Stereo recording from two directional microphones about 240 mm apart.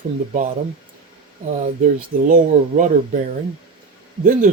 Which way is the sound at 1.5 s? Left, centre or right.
Right.